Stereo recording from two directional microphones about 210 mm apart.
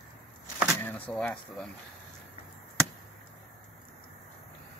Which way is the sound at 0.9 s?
5° left (ahead or behind).